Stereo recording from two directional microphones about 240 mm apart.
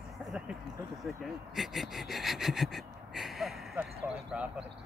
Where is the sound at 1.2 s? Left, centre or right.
Centre.